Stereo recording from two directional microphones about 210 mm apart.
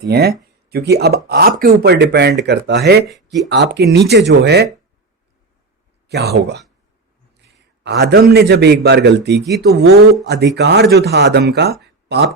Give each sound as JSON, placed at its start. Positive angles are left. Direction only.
{"t": 0.0, "sound": "speech", "side_deg": -50}
{"t": 6.1, "sound": "speech", "side_deg": -50}
{"t": 7.9, "sound": "speech", "side_deg": -50}
{"t": 9.4, "sound": "speech", "side_deg": 0}
{"t": 10.2, "sound": "speech", "side_deg": -55}